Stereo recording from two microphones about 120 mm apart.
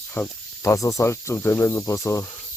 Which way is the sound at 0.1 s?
20° left (ahead or behind).